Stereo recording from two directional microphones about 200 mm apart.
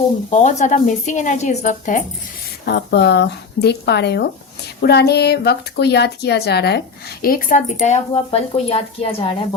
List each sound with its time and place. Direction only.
0.3 s speech: 35° left (ahead or behind)
2.6 s a woman's voice: 55° left (ahead or behind); by 9.3 s 30° left (ahead or behind)